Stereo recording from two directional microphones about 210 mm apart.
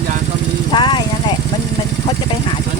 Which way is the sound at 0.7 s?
20° left (ahead or behind).